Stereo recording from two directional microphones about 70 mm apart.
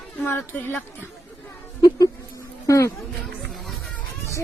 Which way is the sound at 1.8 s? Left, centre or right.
Left.